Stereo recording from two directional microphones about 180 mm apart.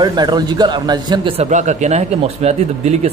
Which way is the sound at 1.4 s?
40° right (ahead or behind).